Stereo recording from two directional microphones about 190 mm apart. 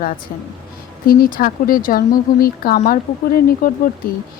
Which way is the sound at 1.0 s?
50° left (ahead or behind).